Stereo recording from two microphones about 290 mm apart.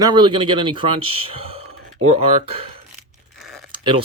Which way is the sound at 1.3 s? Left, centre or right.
Right.